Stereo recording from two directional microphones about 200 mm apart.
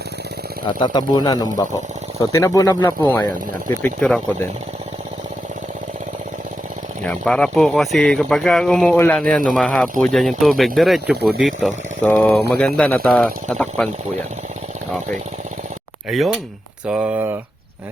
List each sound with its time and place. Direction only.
0.8 s speech: 20° left (ahead or behind)
3.1 s speech: 10° left (ahead or behind)
7.0 s speech: 5° left (ahead or behind)
16.0 s speech: centre (ahead or behind)